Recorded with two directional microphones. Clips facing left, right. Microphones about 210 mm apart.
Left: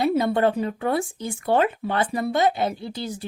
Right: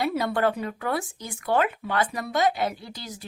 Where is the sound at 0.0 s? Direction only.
25° left (ahead or behind).